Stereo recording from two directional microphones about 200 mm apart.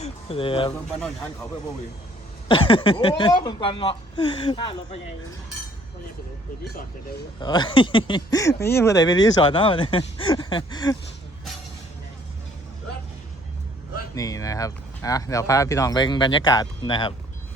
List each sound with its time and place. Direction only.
0.0 s speech: 30° left (ahead or behind)
2.5 s speech: 25° left (ahead or behind)
7.3 s speech: 20° left (ahead or behind)
14.2 s speech: 15° left (ahead or behind)